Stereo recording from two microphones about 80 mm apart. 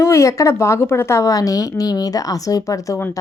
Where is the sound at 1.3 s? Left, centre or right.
Left.